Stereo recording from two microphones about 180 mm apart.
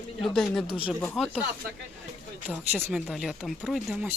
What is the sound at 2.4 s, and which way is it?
Speech, 10° right (ahead or behind).